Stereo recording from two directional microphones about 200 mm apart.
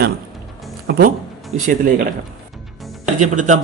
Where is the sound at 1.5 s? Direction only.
35° right (ahead or behind).